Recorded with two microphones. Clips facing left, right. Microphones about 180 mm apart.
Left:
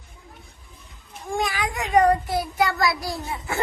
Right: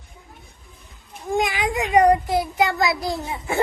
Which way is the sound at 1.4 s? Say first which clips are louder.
Right 4 dB; 20° right (ahead or behind).